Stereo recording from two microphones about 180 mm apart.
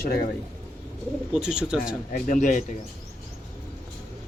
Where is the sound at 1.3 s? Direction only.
5° right (ahead or behind).